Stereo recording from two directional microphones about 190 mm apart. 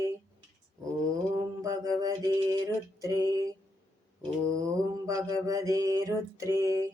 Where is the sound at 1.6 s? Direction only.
20° right (ahead or behind).